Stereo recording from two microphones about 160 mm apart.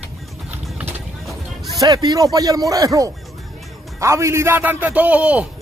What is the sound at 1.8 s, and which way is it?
A man's voice, 25° right (ahead or behind).